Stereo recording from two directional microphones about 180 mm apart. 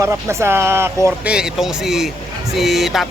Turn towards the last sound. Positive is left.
turn(degrees=0)  # may be behind; listen again after turning